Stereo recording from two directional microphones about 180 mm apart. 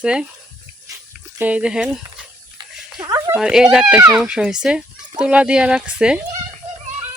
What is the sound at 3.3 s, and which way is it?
Speech, 5° right (ahead or behind).